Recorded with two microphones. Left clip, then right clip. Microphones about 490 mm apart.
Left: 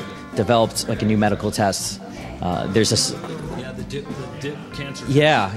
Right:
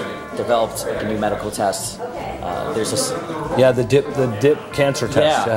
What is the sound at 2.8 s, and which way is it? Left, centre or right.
Speech, left.